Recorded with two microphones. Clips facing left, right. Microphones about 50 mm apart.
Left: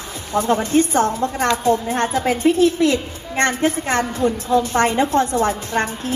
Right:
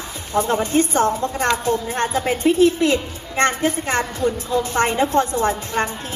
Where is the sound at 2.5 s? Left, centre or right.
Right.